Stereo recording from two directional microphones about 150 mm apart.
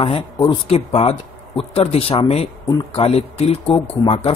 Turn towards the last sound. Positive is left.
turn(degrees=40)  # may be behind; listen again after turning